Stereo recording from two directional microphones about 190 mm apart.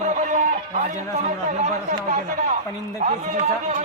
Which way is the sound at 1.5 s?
40° right (ahead or behind).